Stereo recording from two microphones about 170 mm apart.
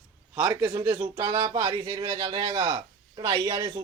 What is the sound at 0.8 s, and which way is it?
A man's voice, 20° right (ahead or behind).